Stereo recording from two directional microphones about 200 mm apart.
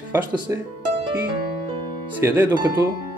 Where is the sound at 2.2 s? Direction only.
10° right (ahead or behind).